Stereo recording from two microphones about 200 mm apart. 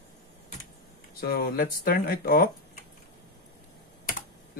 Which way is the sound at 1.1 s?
50° left (ahead or behind).